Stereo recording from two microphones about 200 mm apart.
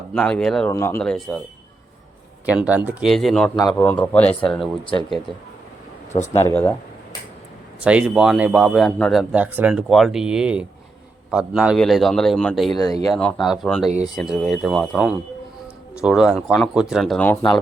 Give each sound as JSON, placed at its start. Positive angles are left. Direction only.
{"t": 0.1, "sound": "a man's voice", "side_deg": 5}
{"t": 2.5, "sound": "a man's voice", "side_deg": -5}
{"t": 3.5, "sound": "a man's voice", "side_deg": 20}
{"t": 3.8, "sound": "speech", "side_deg": 10}
{"t": 6.2, "sound": "speech", "side_deg": 10}
{"t": 7.9, "sound": "a man's voice", "side_deg": -5}
{"t": 12.7, "sound": "a man's voice", "side_deg": 20}
{"t": 13.1, "sound": "a man's voice", "side_deg": 5}